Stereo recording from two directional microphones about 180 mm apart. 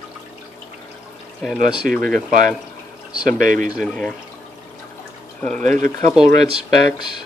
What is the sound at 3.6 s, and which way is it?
Speech, centre (ahead or behind).